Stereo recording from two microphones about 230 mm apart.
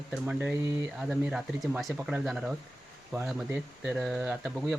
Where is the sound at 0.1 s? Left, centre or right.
Centre.